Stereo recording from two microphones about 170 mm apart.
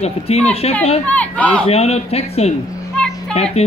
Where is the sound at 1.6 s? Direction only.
40° left (ahead or behind).